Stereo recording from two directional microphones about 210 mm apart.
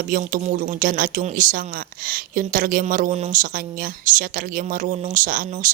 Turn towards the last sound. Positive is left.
turn(degrees=-40)  # may be behind; listen again after turning